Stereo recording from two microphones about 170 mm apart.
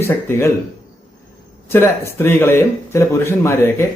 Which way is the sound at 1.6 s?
15° left (ahead or behind).